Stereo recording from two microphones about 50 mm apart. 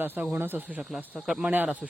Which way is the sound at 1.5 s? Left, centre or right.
Right.